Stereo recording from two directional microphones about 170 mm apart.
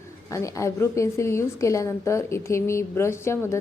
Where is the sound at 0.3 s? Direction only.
20° left (ahead or behind).